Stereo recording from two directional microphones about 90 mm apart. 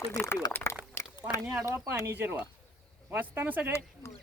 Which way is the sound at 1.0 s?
30° left (ahead or behind).